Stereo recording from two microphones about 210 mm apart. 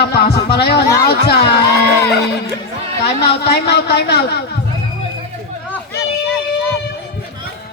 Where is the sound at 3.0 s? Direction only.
50° left (ahead or behind).